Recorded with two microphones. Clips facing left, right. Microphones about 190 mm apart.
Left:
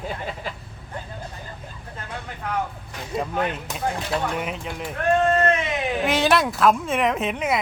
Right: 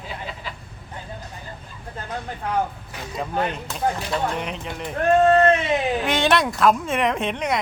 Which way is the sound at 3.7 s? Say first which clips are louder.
Right 2 dB; 15° left (ahead or behind).